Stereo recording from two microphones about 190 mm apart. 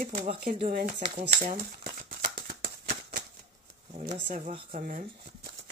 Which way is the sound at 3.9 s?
35° right (ahead or behind).